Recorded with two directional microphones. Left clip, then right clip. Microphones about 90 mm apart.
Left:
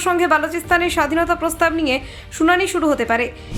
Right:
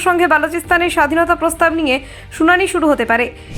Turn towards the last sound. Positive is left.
turn(degrees=-40)  # may be behind; listen again after turning